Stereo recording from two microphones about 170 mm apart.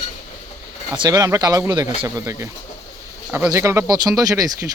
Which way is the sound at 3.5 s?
15° right (ahead or behind).